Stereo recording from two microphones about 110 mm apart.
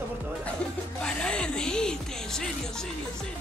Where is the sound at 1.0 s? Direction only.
10° left (ahead or behind).